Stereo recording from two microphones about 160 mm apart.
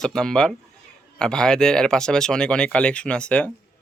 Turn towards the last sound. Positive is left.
turn(degrees=10)  # may be behind; listen again after turning